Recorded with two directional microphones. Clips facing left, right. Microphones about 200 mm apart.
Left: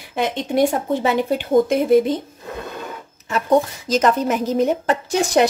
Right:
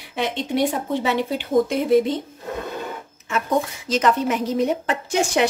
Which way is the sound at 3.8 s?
45° left (ahead or behind).